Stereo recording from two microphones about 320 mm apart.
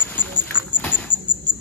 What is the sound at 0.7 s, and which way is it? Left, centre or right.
Rodents, centre.